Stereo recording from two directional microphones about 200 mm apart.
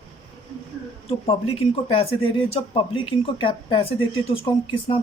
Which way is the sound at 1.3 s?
30° left (ahead or behind).